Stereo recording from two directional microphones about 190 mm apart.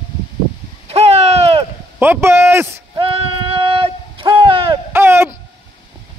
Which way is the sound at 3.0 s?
30° right (ahead or behind).